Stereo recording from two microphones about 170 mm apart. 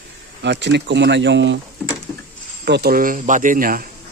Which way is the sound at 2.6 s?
70° right (ahead or behind).